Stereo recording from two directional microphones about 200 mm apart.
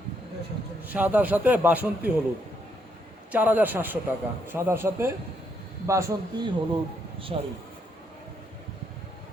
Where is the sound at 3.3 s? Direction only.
10° right (ahead or behind).